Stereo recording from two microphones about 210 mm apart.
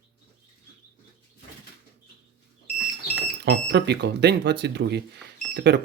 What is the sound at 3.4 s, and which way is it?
Speech, 50° right (ahead or behind).